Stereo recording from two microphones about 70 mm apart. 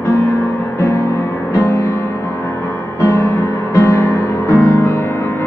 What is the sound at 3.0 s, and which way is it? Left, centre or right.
Music, left.